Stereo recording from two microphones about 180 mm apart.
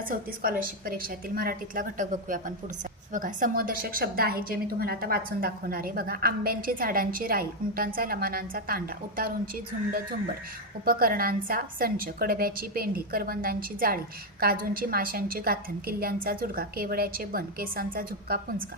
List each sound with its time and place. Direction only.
0.1 s a woman's voice: 50° right (ahead or behind)
10.8 s a woman's voice: 55° right (ahead or behind)